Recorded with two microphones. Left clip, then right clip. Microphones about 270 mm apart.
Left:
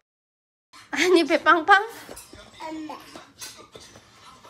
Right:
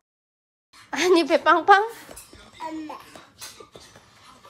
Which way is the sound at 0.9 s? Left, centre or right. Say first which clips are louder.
Even; centre.